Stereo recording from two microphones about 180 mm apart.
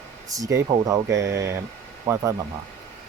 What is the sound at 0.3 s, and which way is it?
Speech, 20° right (ahead or behind).